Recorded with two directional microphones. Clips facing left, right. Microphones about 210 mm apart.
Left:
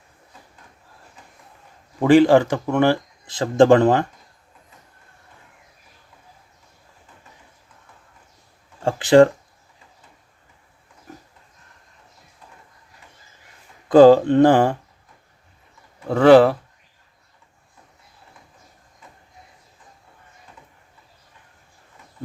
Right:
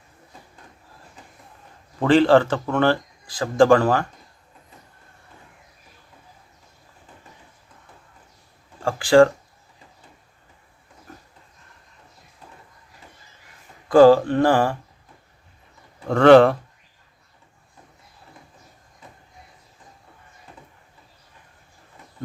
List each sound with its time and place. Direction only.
2.0 s speech: 15° left (ahead or behind)
3.2 s speech: 25° left (ahead or behind)
8.8 s speech: 20° left (ahead or behind)
13.8 s speech: 20° left (ahead or behind)
16.0 s speech: 5° left (ahead or behind)